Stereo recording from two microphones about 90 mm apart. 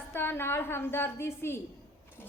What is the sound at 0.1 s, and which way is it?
A woman's voice, 25° left (ahead or behind).